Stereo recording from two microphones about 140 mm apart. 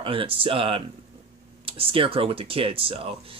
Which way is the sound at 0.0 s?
40° right (ahead or behind).